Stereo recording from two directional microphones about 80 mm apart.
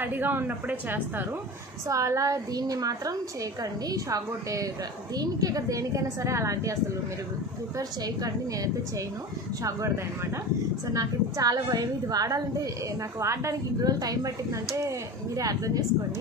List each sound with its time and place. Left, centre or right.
0.0 s a woman's voice: right
1.9 s a woman's voice: right
9.6 s a woman's voice: right
13.2 s speech: right
13.8 s a woman's voice: right